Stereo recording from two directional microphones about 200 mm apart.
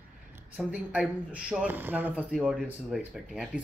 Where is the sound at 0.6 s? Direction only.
5° right (ahead or behind).